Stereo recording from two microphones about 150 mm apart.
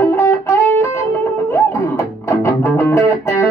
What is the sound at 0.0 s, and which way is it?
Music, 15° left (ahead or behind).